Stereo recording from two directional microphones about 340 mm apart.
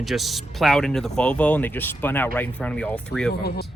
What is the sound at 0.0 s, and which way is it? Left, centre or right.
Speech, centre.